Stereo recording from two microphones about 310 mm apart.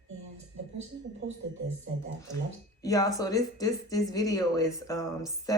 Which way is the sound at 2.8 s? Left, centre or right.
Centre.